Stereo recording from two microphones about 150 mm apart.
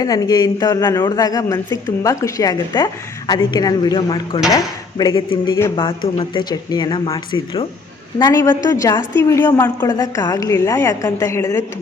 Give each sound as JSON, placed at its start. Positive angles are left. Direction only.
{"t": 0.0, "sound": "a man's voice", "side_deg": 25}
{"t": 8.2, "sound": "a man's voice", "side_deg": 20}